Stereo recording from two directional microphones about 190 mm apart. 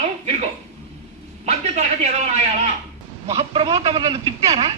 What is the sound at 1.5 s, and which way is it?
A man's voice, 35° right (ahead or behind).